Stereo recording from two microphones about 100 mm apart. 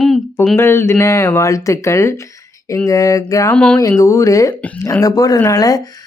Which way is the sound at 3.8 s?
35° left (ahead or behind).